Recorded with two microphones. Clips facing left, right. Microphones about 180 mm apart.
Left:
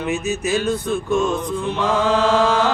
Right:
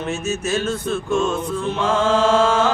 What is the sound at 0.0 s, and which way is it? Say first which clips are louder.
Mantra: left 2 dB; 15° left (ahead or behind).